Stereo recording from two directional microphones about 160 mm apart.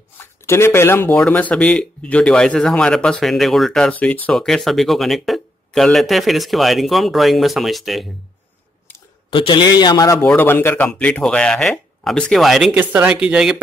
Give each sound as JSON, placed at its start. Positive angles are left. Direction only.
{"t": 0.2, "sound": "speech", "side_deg": 15}
{"t": 9.3, "sound": "a man's voice", "side_deg": 30}
{"t": 10.2, "sound": "speech", "side_deg": 10}